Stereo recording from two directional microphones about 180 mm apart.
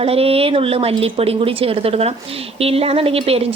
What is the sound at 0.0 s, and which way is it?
Speech, 35° right (ahead or behind).